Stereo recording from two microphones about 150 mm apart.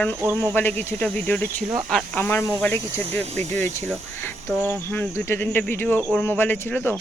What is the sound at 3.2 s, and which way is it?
Speech, 50° right (ahead or behind).